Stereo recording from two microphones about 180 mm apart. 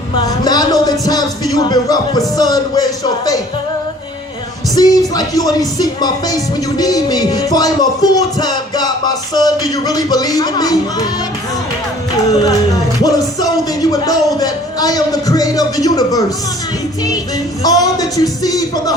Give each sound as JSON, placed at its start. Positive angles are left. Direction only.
{"t": 0.1, "sound": "a man's voice", "side_deg": 25}
{"t": 4.7, "sound": "speech", "side_deg": 20}
{"t": 13.0, "sound": "speech", "side_deg": 20}
{"t": 17.6, "sound": "speech", "side_deg": 20}